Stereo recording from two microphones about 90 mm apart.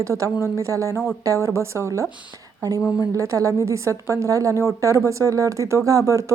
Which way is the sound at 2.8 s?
5° right (ahead or behind).